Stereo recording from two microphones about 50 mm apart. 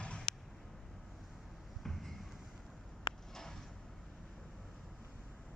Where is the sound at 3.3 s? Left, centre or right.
Centre.